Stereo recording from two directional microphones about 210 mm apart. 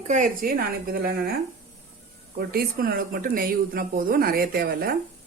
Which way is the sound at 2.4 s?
50° right (ahead or behind).